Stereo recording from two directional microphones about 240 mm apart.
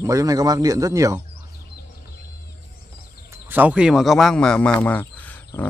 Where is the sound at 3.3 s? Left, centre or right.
Centre.